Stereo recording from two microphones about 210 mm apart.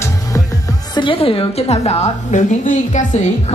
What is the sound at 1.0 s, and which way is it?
A woman's voice, 25° left (ahead or behind).